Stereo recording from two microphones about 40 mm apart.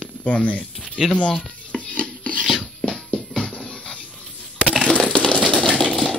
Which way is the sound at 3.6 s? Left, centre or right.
Left.